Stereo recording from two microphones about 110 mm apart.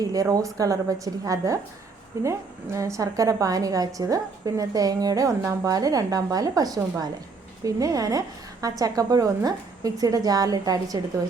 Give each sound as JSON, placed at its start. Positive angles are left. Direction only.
{"t": 0.0, "sound": "a woman's voice", "side_deg": -35}